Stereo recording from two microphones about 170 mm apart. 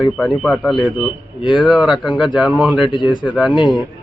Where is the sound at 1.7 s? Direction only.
5° right (ahead or behind).